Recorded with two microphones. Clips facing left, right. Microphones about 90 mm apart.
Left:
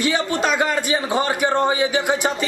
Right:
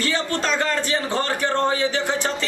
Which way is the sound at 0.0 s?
15° left (ahead or behind).